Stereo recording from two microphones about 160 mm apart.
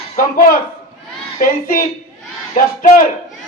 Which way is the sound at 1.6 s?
60° left (ahead or behind).